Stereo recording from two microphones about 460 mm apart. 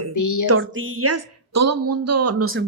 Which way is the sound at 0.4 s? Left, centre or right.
Right.